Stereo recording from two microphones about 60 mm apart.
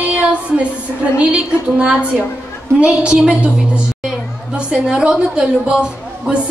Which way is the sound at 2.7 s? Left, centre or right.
Centre.